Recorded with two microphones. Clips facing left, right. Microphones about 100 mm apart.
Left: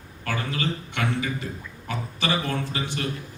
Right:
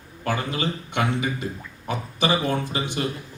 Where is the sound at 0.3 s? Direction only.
20° right (ahead or behind).